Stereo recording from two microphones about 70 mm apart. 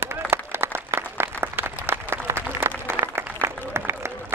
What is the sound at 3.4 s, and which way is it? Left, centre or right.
Applause, right.